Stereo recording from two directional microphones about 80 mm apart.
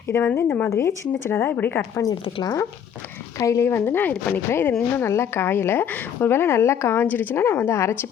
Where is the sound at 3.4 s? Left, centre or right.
Left; by 4.4 s centre.